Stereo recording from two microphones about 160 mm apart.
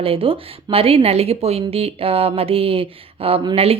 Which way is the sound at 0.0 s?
35° right (ahead or behind).